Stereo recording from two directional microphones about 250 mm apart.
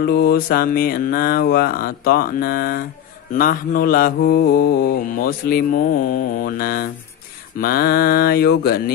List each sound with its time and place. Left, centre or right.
0.0 s mantra: left